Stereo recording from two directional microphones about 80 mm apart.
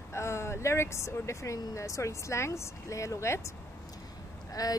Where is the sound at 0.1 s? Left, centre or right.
Left.